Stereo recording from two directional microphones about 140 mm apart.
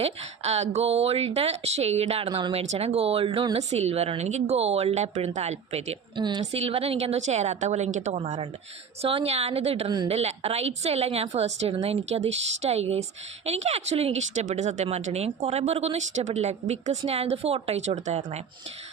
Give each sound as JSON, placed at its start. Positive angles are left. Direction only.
{"t": 0.0, "sound": "a woman's voice", "side_deg": -50}
{"t": 6.1, "sound": "a woman's voice", "side_deg": -30}
{"t": 6.4, "sound": "a woman's voice", "side_deg": -50}
{"t": 9.0, "sound": "a woman's voice", "side_deg": -45}